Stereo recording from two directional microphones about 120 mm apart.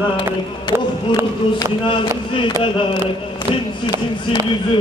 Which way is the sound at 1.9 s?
45° left (ahead or behind).